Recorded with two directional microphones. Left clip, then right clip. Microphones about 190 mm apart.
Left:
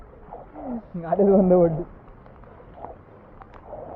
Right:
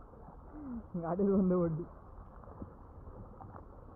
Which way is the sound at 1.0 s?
10° left (ahead or behind).